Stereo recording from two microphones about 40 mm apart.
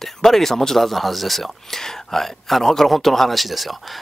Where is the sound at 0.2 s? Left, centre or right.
Centre.